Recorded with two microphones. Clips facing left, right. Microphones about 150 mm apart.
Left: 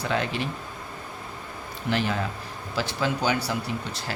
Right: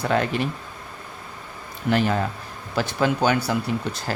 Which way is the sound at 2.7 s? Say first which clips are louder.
Right 5 dB; 55° right (ahead or behind).